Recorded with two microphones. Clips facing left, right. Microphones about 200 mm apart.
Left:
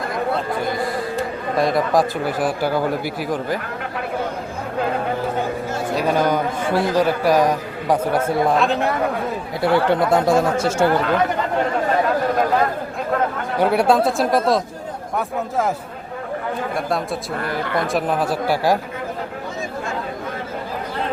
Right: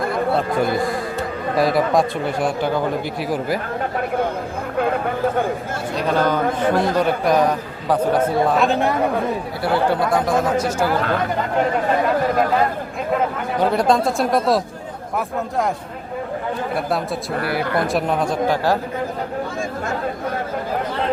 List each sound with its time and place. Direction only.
1.5 s a man's voice: centre (ahead or behind)
6.0 s a man's voice: 10° left (ahead or behind)
8.5 s a man's voice: centre (ahead or behind)
9.6 s speech: 20° left (ahead or behind)
13.6 s a man's voice: 10° left (ahead or behind)
17.4 s a man's voice: 5° right (ahead or behind); by 18.8 s 10° left (ahead or behind)